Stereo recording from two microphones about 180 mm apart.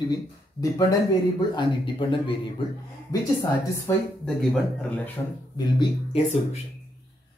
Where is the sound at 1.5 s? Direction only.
25° left (ahead or behind).